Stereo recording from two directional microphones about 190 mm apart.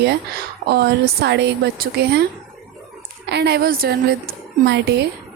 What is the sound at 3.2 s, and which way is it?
Speech, 60° right (ahead or behind).